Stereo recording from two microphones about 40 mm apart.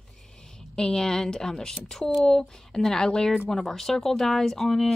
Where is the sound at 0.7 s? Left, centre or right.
Centre.